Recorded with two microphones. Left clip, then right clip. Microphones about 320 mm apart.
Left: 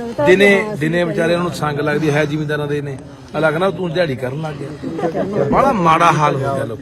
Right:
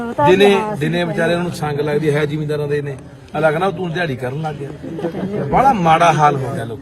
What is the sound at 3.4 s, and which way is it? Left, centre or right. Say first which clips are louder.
A man's voice: even; centre.